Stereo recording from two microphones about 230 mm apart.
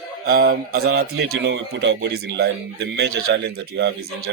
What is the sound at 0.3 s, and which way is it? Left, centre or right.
Speech, right.